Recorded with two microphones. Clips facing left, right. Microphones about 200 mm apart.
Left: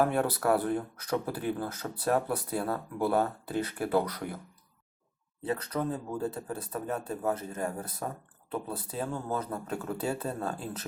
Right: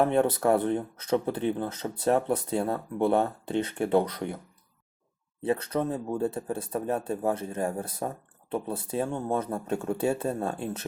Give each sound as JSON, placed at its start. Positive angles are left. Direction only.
{"t": 0.0, "sound": "speech", "side_deg": -25}
{"t": 5.4, "sound": "speech", "side_deg": -25}